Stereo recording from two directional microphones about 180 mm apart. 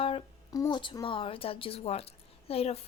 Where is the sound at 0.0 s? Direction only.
30° left (ahead or behind).